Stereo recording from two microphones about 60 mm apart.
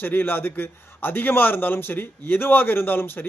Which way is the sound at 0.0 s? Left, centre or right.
Left.